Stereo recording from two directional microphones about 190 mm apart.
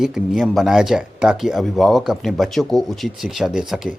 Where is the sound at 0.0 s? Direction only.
5° right (ahead or behind).